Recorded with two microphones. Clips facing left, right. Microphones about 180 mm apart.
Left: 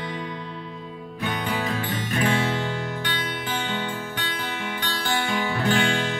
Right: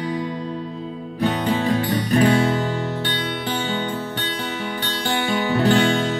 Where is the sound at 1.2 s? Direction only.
35° right (ahead or behind).